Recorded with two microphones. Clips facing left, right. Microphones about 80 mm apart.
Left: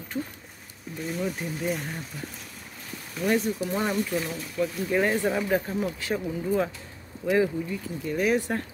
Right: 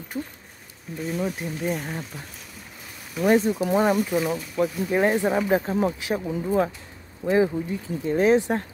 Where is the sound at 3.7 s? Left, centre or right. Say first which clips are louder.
Right 6 dB; right.